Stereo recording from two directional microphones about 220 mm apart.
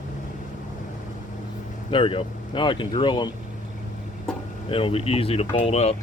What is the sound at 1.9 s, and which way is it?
Speech, 25° left (ahead or behind).